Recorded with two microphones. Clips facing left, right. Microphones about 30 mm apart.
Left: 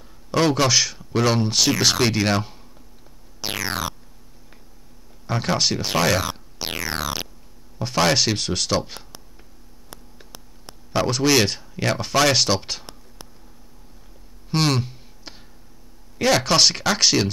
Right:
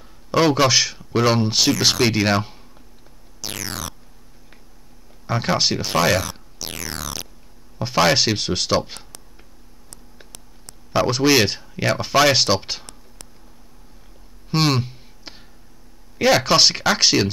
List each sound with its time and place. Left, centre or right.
0.3 s speech: centre
3.3 s music: left
5.2 s speech: centre
6.6 s music: left
7.8 s speech: centre
11.1 s speech: centre
14.5 s a sound: centre
16.2 s speech: centre